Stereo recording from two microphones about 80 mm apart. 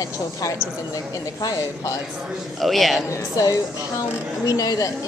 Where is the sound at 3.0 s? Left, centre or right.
Left.